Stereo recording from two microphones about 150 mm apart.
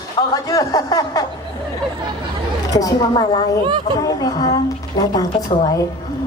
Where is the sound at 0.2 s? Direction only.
25° left (ahead or behind).